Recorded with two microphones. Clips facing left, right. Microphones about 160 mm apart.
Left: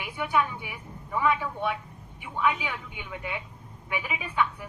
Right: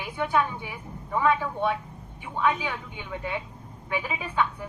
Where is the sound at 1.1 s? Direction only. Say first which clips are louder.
Right 2 dB; 40° right (ahead or behind).